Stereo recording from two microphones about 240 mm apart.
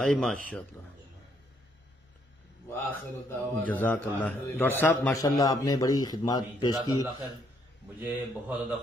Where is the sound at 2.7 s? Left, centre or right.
Centre.